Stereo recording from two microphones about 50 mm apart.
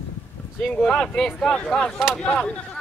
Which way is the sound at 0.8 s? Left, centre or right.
Centre.